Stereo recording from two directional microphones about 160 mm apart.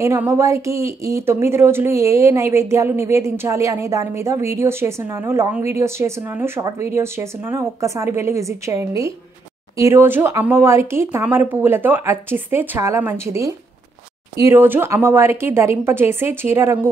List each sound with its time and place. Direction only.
0.0 s a woman's voice: 20° right (ahead or behind)